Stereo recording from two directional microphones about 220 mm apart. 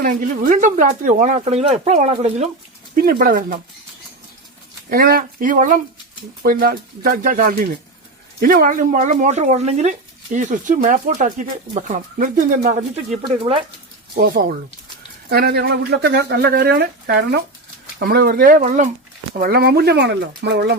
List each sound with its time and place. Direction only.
0.0 s speech: 40° right (ahead or behind)
2.9 s speech: 40° right (ahead or behind)
4.9 s speech: 40° right (ahead or behind)
13.2 s speech: 25° right (ahead or behind)
14.2 s speech: 40° right (ahead or behind)